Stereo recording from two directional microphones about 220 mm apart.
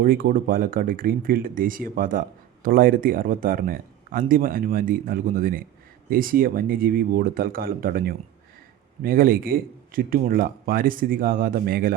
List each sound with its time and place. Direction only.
0.0 s speech: 40° right (ahead or behind)